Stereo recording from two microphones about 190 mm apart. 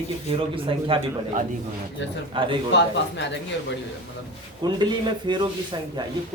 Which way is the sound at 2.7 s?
70° left (ahead or behind).